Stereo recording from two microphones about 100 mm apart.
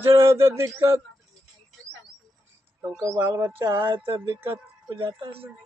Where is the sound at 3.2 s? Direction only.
35° right (ahead or behind).